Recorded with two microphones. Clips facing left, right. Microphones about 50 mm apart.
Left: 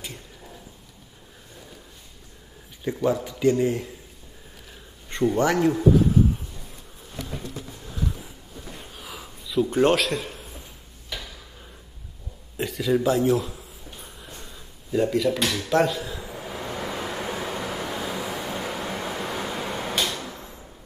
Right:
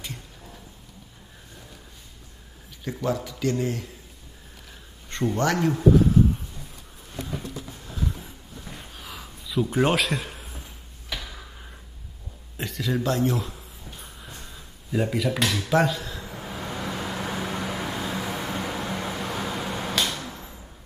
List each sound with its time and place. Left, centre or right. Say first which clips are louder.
2.8 s a man's voice: left 4 dB; centre
5.1 s a man's voice: left 3 dB; centre
8.9 s a sound: left 1 dB; centre
12.5 s speech: left 5 dB; centre
14.0 s a sound: even; centre
16.8 s vehicle: even; centre